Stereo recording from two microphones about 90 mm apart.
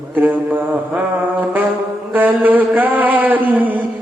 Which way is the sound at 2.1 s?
20° right (ahead or behind).